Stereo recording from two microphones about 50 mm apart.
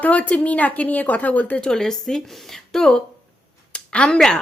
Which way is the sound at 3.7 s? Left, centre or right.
Left.